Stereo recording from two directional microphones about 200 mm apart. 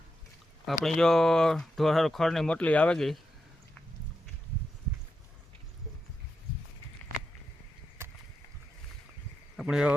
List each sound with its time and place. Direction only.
0.6 s speech: centre (ahead or behind)
9.6 s speech: 5° right (ahead or behind)